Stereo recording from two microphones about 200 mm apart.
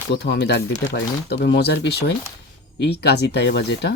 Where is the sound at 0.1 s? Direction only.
55° left (ahead or behind).